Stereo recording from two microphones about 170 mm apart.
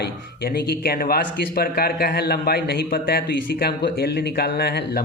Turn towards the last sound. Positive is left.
turn(degrees=70)  # may be behind; listen again after turning